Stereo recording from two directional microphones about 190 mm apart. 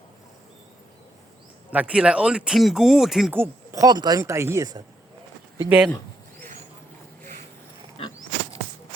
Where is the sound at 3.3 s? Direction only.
15° right (ahead or behind).